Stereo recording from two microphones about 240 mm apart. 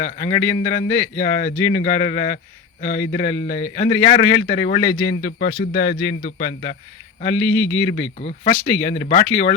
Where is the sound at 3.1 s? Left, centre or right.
Left.